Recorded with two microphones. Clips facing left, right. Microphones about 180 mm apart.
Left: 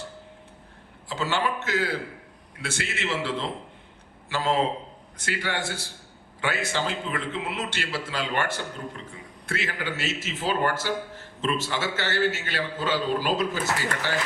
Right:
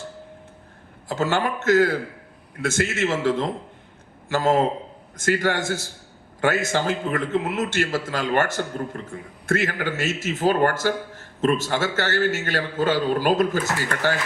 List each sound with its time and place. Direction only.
1.0 s a man's voice: 50° right (ahead or behind)